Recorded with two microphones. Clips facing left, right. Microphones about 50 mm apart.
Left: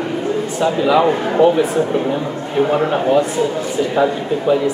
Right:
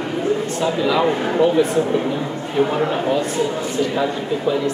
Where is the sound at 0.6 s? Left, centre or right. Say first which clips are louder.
Left 7 dB; centre.